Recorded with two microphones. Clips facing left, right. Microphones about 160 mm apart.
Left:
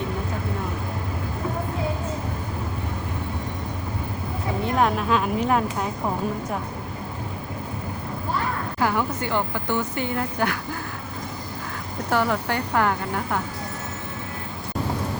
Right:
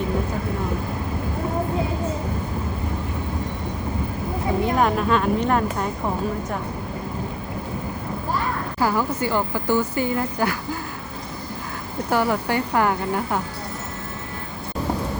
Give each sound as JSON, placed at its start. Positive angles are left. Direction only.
{"t": 4.6, "sound": "speech", "side_deg": 0}
{"t": 8.8, "sound": "speech", "side_deg": -5}
{"t": 12.1, "sound": "speech", "side_deg": -10}